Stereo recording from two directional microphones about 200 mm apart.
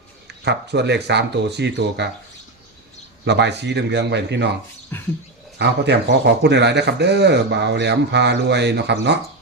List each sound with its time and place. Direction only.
0.3 s speech: 60° right (ahead or behind)
3.2 s speech: 60° right (ahead or behind)
4.9 s a sound: 10° left (ahead or behind)
5.5 s speech: 55° right (ahead or behind)